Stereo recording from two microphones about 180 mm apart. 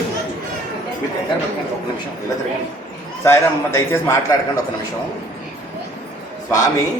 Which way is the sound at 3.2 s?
15° left (ahead or behind).